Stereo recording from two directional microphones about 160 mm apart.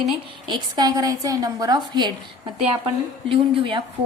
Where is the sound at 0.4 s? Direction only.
25° right (ahead or behind).